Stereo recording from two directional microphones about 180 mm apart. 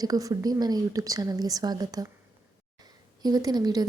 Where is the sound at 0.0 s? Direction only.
20° right (ahead or behind).